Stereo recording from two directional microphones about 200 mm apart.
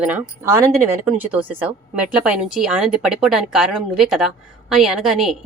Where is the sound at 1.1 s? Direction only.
10° right (ahead or behind).